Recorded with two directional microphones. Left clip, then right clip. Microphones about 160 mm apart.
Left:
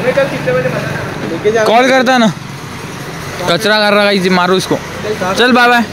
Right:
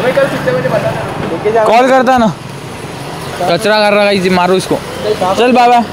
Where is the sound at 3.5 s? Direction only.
5° left (ahead or behind).